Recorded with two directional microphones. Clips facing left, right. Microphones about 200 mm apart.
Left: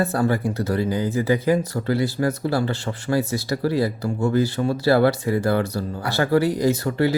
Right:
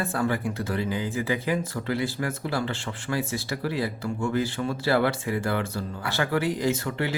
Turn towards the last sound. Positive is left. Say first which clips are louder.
# left 6 dB
turn(degrees=40)  # may be behind; listen again after turning